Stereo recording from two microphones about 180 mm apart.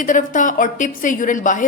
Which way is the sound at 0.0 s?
45° left (ahead or behind).